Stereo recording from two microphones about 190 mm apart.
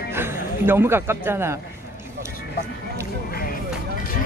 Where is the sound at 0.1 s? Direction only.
10° right (ahead or behind).